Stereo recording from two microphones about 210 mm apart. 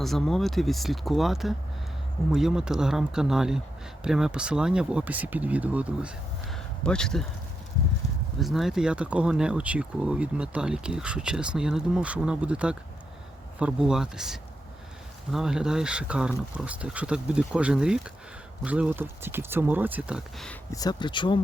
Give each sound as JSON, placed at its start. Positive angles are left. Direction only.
{"t": 0.0, "sound": "speech", "side_deg": 0}
{"t": 8.4, "sound": "speech", "side_deg": 0}
{"t": 20.5, "sound": "speech", "side_deg": 15}